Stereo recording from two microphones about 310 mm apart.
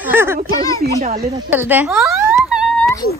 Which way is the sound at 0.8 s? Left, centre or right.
Right.